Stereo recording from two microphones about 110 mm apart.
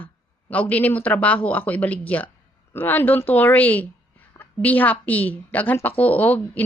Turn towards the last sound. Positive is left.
turn(degrees=15)  # may be behind; listen again after turning